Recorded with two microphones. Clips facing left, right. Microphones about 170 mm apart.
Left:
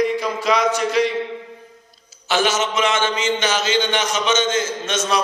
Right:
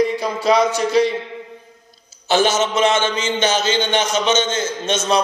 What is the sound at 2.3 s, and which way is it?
A man's voice, 30° right (ahead or behind).